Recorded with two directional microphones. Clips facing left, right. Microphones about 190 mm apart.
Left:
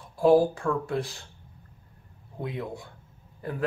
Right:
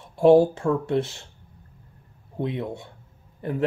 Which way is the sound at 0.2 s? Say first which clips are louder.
Right 4 dB; 25° right (ahead or behind).